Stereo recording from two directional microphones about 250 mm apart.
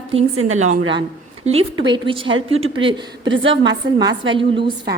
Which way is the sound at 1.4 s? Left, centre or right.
Right.